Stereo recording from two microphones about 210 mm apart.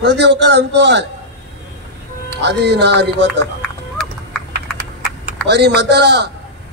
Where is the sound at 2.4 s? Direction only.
55° right (ahead or behind).